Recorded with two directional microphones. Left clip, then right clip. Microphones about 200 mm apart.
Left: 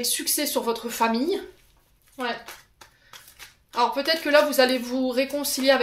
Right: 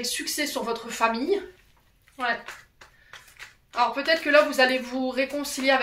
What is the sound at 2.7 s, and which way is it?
Speech, 50° left (ahead or behind).